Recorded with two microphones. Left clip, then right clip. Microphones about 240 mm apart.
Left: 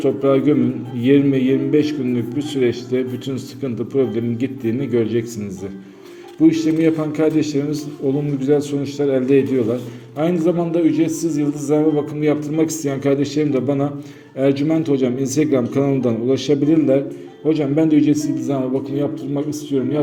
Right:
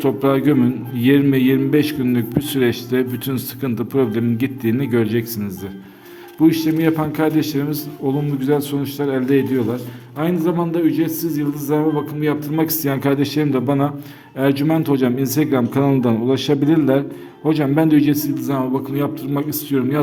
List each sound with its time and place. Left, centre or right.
0.0 s a man's voice: right
6.4 s a man's voice: right